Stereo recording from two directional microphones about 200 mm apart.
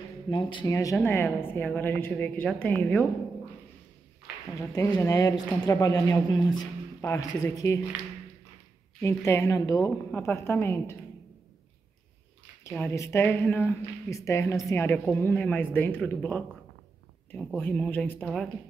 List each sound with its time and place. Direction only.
0.3 s a woman's voice: 25° left (ahead or behind); by 3.1 s 10° left (ahead or behind)
4.6 s a woman's voice: 15° left (ahead or behind)
9.0 s a woman's voice: 15° left (ahead or behind)
12.6 s a woman's voice: 15° left (ahead or behind)